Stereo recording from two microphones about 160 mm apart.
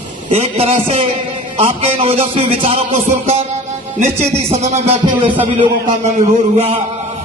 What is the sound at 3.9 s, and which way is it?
Speech, 45° right (ahead or behind).